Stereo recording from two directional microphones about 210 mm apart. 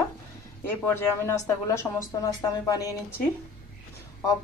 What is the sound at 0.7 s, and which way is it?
A woman's voice, 10° left (ahead or behind).